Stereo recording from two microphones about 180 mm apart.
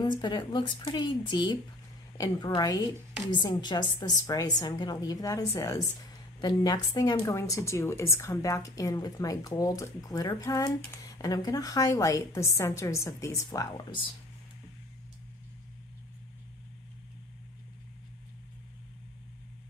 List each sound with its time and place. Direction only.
0.2 s a woman's voice: 25° left (ahead or behind)